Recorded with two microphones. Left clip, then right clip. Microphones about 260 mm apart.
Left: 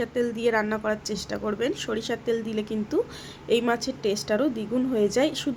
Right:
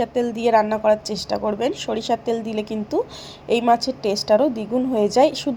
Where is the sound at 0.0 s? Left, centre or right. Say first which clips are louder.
Right 4 dB; centre.